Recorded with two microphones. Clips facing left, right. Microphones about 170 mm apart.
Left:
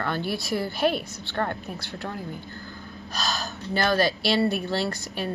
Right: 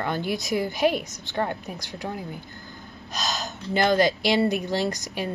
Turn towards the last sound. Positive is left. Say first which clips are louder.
# right 2 dB
turn(degrees=-15)  # may be behind; listen again after turning